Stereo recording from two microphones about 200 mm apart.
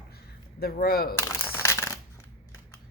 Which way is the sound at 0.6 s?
50° left (ahead or behind).